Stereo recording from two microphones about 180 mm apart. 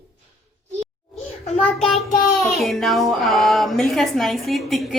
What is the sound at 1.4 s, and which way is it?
Speech, 40° left (ahead or behind).